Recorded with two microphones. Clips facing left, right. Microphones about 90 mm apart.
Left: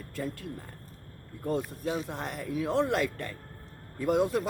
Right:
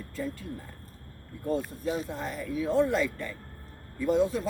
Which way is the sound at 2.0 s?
65° left (ahead or behind).